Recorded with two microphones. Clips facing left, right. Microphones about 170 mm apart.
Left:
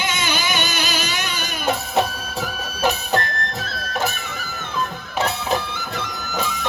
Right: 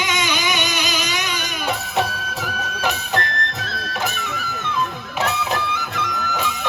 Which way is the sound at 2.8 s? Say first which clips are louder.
Left 3 dB; 35° left (ahead or behind).